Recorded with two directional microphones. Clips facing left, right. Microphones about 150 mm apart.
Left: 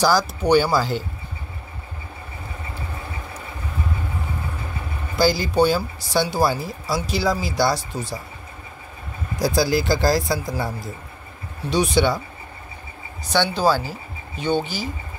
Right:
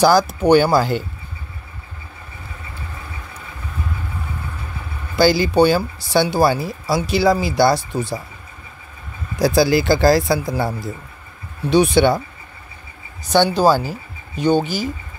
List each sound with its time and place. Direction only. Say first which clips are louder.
0.0 s speech: right 5 dB; 55° right (ahead or behind)
5.1 s speech: right 4 dB; 75° right (ahead or behind); by 8.2 s 60° right (ahead or behind)
9.4 s speech: right 5 dB; 70° right (ahead or behind)
11.7 s speech: right 5 dB; 60° right (ahead or behind)
13.3 s speech: right 5 dB; 45° right (ahead or behind)